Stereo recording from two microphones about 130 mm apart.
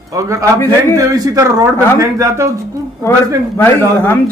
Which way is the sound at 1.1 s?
25° right (ahead or behind).